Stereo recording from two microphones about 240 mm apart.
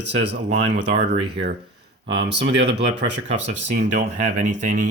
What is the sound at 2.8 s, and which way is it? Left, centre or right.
Speech, right.